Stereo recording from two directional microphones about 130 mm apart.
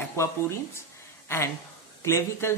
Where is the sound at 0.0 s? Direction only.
20° left (ahead or behind).